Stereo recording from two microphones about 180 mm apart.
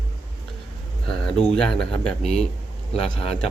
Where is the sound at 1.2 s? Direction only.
5° left (ahead or behind).